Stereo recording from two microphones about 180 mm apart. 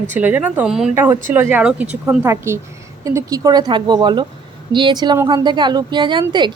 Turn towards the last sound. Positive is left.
turn(degrees=-25)  # may be behind; listen again after turning